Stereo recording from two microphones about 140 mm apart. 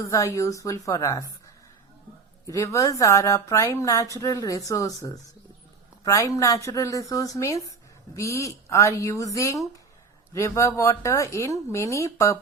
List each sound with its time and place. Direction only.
0.0 s speech: 20° left (ahead or behind)
2.5 s speech: 20° left (ahead or behind)